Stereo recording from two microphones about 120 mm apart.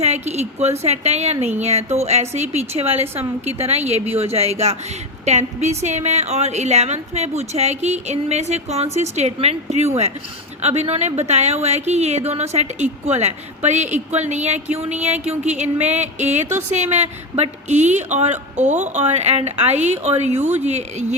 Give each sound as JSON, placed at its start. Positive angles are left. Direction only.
{"t": 0.0, "sound": "a woman's voice", "side_deg": -65}